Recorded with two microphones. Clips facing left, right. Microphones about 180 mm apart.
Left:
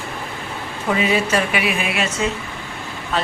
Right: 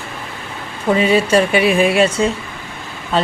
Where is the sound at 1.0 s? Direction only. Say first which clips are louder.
Right 6 dB; 30° right (ahead or behind).